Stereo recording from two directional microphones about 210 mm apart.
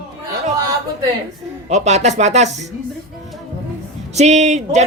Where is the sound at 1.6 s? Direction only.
30° right (ahead or behind).